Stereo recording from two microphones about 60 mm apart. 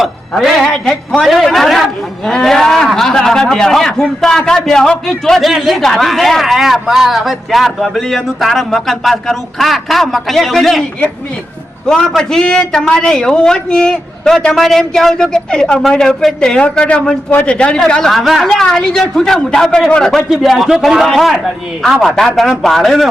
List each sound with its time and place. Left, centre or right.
0.0 s speech: centre
1.2 s a man's voice: centre
11.9 s a man's voice: centre
18.1 s a man's voice: centre